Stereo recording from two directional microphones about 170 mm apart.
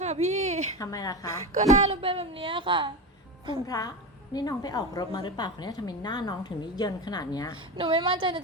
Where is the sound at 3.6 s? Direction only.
20° left (ahead or behind).